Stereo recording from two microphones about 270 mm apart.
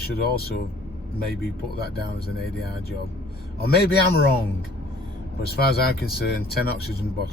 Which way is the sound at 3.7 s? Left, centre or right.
Left.